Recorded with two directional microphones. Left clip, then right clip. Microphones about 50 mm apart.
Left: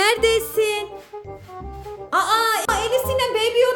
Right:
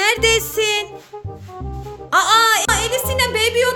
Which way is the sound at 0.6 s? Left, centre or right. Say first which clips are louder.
Right 3 dB; centre.